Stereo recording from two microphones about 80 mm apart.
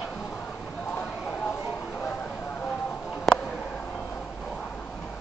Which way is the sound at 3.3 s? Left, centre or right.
Centre.